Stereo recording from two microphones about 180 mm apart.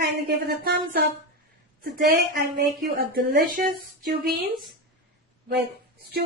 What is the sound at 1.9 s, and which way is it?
Speech, 55° right (ahead or behind).